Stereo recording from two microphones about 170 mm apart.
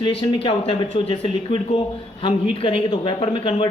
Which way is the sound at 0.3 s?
35° left (ahead or behind).